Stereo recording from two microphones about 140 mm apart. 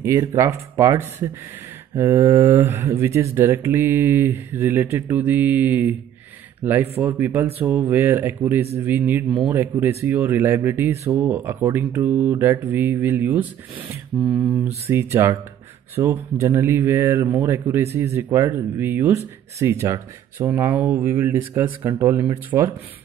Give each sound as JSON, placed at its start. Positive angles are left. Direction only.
{"t": 0.0, "sound": "speech", "side_deg": -20}
{"t": 14.3, "sound": "speech", "side_deg": -5}
{"t": 14.9, "sound": "speech", "side_deg": -20}